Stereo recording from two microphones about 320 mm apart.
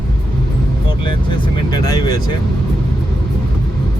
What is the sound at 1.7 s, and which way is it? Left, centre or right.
Speech, centre.